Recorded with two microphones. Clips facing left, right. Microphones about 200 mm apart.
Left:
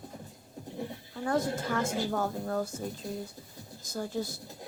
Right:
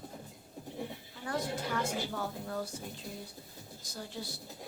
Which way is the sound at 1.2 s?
45° left (ahead or behind).